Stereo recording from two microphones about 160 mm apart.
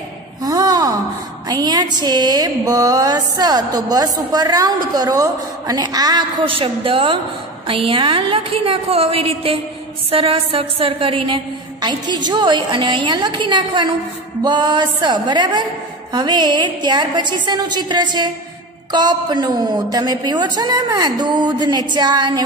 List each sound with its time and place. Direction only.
0.4 s a sound: 25° right (ahead or behind)
1.5 s music: 25° right (ahead or behind)
7.6 s a woman's voice: 35° right (ahead or behind)
14.4 s music: 30° right (ahead or behind)